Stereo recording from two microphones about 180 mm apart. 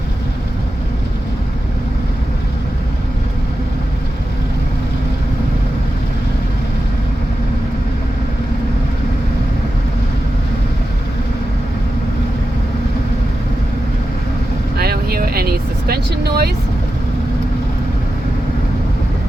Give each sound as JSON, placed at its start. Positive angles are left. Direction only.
{"t": 14.8, "sound": "vehicle", "side_deg": -60}